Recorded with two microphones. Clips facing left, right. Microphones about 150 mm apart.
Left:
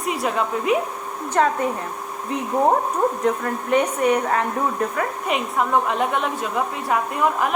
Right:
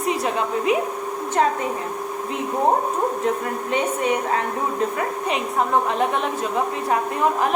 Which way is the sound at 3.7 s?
20° right (ahead or behind).